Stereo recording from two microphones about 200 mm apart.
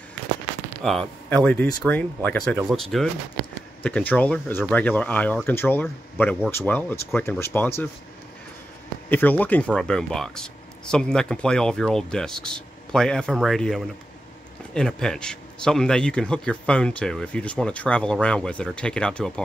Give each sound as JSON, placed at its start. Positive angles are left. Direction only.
{"t": 0.8, "sound": "speech", "side_deg": 5}
{"t": 9.1, "sound": "speech", "side_deg": 10}